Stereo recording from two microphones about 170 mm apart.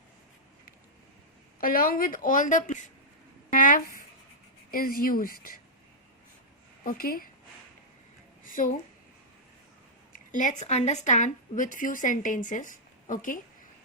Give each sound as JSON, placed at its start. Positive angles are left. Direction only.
{"t": 1.6, "sound": "a woman's voice", "side_deg": 55}
{"t": 3.5, "sound": "a sound", "side_deg": 50}
{"t": 4.7, "sound": "speech", "side_deg": 60}
{"t": 6.8, "sound": "speech", "side_deg": 60}
{"t": 8.4, "sound": "a sound", "side_deg": 55}
{"t": 10.1, "sound": "a woman's voice", "side_deg": 50}